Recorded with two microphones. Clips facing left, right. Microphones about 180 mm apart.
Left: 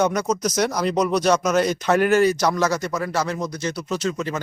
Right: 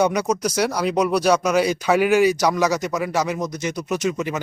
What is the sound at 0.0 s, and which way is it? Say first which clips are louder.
Speech: right 1 dB; 10° right (ahead or behind).